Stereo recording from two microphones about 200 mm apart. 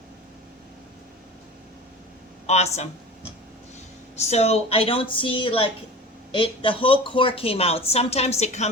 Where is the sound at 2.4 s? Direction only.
35° left (ahead or behind).